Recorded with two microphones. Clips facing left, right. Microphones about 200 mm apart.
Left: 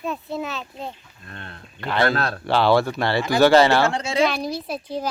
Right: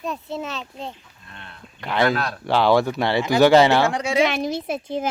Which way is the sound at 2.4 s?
15° right (ahead or behind).